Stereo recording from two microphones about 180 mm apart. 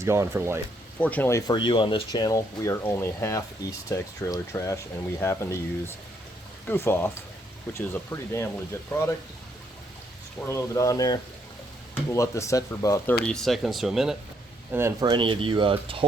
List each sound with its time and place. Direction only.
0.0 s speech: 15° right (ahead or behind)
0.9 s speech: 10° left (ahead or behind)
10.5 s speech: 20° left (ahead or behind)
13.2 s speech: centre (ahead or behind)
14.7 s speech: 15° right (ahead or behind)
15.2 s speech: 30° right (ahead or behind)